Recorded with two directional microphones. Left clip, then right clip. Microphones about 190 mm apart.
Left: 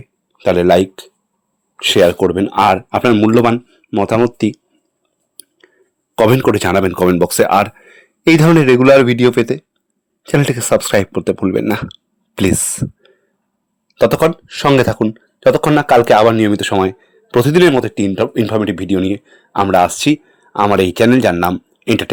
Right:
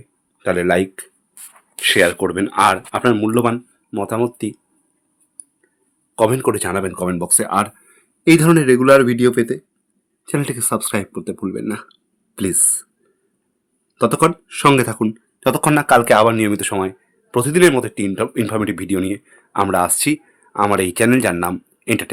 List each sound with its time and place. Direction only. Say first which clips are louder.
0.3 s speech: left 6 dB; 30° left (ahead or behind)
5.4 s a sound: left 4 dB; 35° left (ahead or behind)
6.1 s speech: left 5 dB; 35° left (ahead or behind)